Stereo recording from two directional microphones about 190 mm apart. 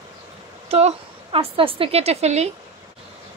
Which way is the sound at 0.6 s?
35° right (ahead or behind).